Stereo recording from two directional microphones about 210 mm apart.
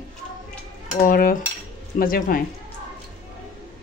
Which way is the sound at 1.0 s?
45° left (ahead or behind).